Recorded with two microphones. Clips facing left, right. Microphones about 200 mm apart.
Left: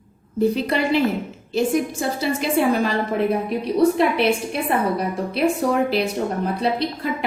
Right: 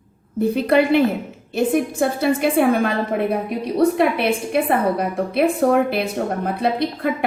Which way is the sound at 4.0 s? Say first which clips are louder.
Even; 55° right (ahead or behind).